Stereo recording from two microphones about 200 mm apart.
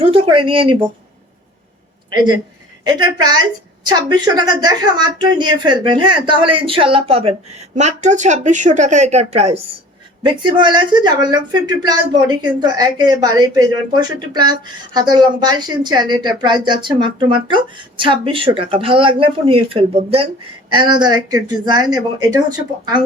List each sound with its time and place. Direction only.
0.0 s speech: 25° right (ahead or behind)
2.8 s speech: 20° right (ahead or behind)
15.1 s speech: 20° right (ahead or behind)